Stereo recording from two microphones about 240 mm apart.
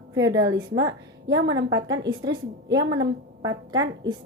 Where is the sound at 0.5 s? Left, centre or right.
Right.